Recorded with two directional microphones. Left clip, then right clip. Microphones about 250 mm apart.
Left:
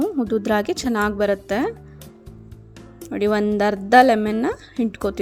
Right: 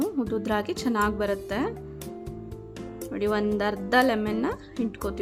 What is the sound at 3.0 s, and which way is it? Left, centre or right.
A woman's voice, left.